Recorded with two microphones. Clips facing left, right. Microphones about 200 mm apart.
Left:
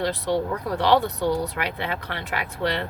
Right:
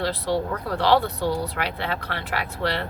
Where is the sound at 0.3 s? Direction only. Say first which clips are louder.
Left 1 dB; 15° left (ahead or behind).